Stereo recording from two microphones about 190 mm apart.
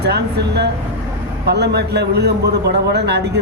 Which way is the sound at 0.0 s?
60° right (ahead or behind).